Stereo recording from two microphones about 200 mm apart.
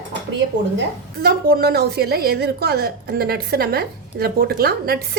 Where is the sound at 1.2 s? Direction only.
50° right (ahead or behind).